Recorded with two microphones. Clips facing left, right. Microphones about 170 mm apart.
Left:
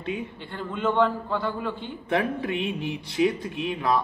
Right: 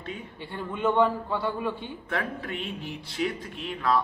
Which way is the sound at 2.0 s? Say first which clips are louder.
Left 7 dB; 15° left (ahead or behind).